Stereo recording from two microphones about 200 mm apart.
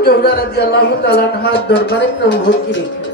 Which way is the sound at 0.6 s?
55° left (ahead or behind).